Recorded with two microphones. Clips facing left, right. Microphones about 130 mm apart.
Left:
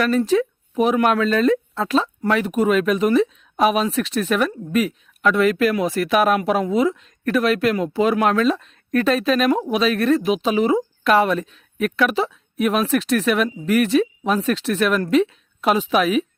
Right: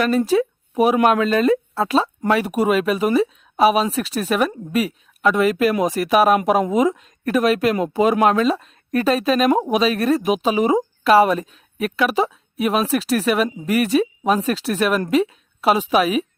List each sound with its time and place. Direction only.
0.0 s speech: 10° right (ahead or behind)